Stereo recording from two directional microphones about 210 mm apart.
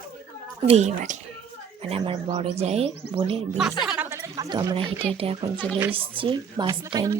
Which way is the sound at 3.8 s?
5° right (ahead or behind).